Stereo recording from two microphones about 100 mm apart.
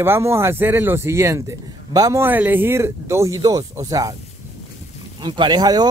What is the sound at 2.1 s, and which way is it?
Speech, 20° right (ahead or behind).